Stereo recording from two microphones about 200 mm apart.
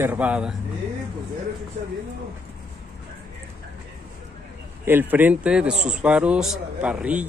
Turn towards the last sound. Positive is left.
turn(degrees=-5)  # may be behind; listen again after turning